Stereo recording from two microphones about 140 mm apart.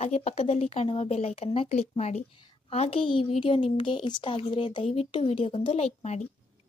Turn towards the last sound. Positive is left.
turn(degrees=55)  # may be behind; listen again after turning